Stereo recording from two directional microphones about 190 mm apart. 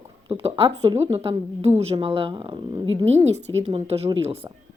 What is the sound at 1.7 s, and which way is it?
Speech, 30° right (ahead or behind).